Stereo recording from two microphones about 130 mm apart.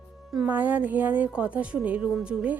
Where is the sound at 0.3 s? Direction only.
10° right (ahead or behind).